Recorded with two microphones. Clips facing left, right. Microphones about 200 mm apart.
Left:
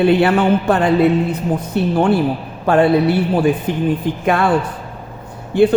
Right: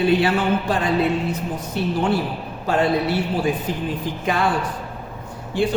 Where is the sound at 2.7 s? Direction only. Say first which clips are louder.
Left 7 dB; 60° left (ahead or behind).